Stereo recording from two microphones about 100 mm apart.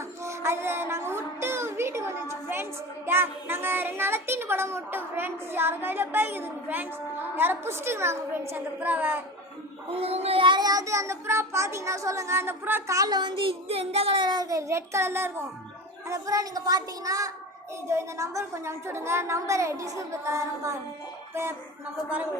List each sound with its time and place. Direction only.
0.0 s child singing: 25° right (ahead or behind)
3.1 s a child's voice: 25° right (ahead or behind)
9.9 s child singing: 85° right
10.4 s child singing: 50° right (ahead or behind)
10.7 s a child's voice: 35° right (ahead or behind)
12.9 s a child's voice: 40° right (ahead or behind); by 14.2 s 75° right (ahead or behind)
14.2 s a child's voice: 45° right (ahead or behind); by 20.7 s 30° right (ahead or behind)